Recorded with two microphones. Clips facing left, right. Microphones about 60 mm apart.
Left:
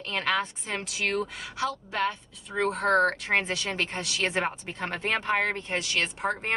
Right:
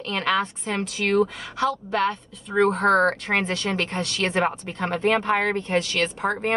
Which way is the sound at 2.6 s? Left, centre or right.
Right.